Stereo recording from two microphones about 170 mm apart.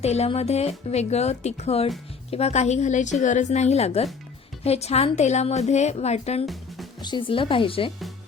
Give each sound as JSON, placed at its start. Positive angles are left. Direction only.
{"t": 0.0, "sound": "speech", "side_deg": 40}
{"t": 6.4, "sound": "music", "side_deg": 0}
{"t": 7.0, "sound": "speech", "side_deg": 30}